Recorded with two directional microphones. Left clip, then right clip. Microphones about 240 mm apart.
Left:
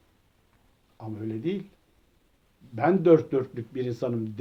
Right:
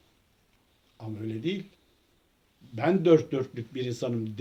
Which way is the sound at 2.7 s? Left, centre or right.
Right.